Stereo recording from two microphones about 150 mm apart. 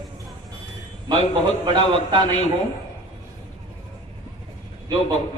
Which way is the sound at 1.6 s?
30° right (ahead or behind).